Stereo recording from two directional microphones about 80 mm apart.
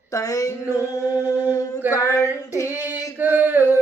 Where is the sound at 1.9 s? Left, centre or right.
Left.